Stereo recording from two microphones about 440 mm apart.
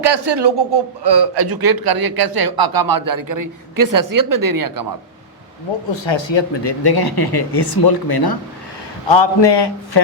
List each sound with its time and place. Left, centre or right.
0.0 s a man's voice: right
5.9 s speech: left
9.0 s a man's voice: left